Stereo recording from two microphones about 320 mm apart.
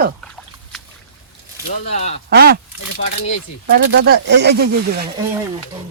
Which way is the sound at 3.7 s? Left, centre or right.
Right.